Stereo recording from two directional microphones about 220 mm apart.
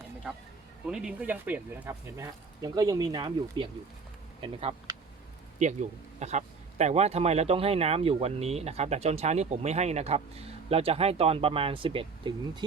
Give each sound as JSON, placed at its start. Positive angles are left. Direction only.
{"t": 0.9, "sound": "speech", "side_deg": -5}